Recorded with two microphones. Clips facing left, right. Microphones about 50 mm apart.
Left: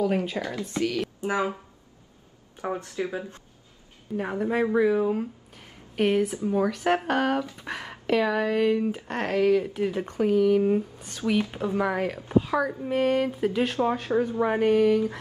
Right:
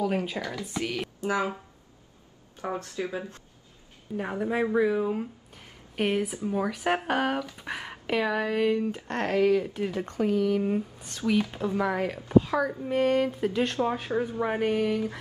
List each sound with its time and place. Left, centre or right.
0.0 s speech: centre
0.4 s a woman's voice: left
2.8 s a woman's voice: left
4.2 s speech: centre
9.8 s speech: centre
11.2 s a woman's voice: left
11.6 s speech: centre
13.9 s speech: centre